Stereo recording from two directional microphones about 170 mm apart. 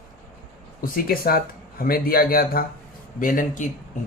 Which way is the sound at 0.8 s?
60° left (ahead or behind).